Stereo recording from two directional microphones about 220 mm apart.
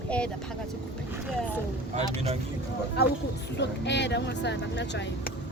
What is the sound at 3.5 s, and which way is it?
Speech, 50° left (ahead or behind).